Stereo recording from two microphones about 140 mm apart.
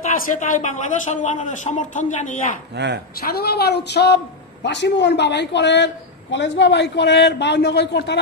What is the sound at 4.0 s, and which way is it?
Speech, 90° left.